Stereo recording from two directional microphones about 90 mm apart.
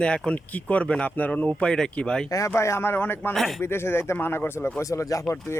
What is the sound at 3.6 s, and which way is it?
Speech, 25° left (ahead or behind).